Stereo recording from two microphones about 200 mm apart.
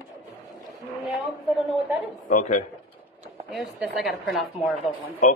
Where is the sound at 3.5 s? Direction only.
Centre (ahead or behind).